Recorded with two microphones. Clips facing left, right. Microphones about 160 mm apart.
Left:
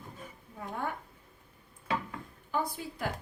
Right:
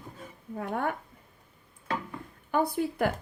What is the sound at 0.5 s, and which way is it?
Speech, 65° right (ahead or behind).